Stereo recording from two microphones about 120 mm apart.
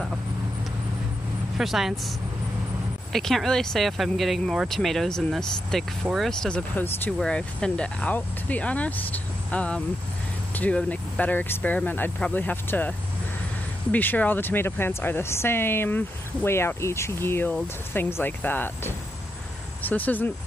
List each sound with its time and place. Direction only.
1.6 s speech: centre (ahead or behind); by 12.9 s 15° left (ahead or behind)
13.9 s speech: 15° left (ahead or behind)